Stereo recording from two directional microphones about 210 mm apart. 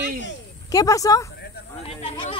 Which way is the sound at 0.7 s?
15° left (ahead or behind).